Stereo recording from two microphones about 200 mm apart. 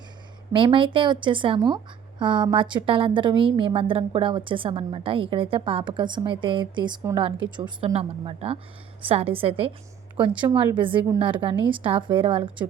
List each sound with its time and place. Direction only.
0.5 s a woman's voice: 25° right (ahead or behind)